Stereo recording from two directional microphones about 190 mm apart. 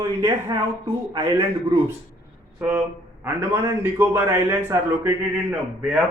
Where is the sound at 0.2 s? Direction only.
15° right (ahead or behind).